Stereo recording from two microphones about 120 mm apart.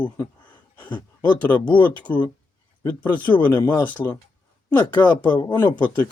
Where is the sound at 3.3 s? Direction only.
40° left (ahead or behind).